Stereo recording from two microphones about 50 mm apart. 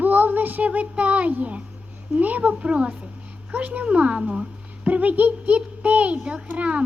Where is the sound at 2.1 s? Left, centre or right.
Right.